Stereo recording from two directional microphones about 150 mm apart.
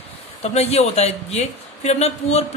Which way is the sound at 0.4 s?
45° left (ahead or behind).